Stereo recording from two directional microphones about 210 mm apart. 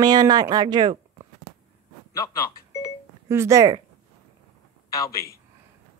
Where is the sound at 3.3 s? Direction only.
15° right (ahead or behind).